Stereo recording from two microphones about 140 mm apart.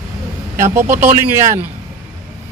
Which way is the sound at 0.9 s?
55° right (ahead or behind).